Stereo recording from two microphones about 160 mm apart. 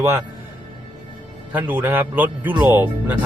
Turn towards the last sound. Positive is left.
turn(degrees=-10)  # may be behind; listen again after turning